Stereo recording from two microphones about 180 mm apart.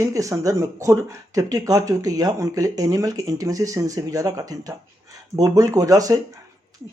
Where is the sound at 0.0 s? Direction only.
15° right (ahead or behind).